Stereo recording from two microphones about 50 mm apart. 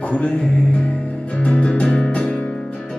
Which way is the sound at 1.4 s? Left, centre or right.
Left.